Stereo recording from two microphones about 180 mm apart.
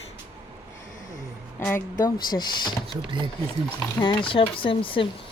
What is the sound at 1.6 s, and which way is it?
Speech, 10° left (ahead or behind).